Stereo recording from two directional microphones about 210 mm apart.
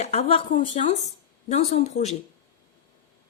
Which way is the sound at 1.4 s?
30° left (ahead or behind).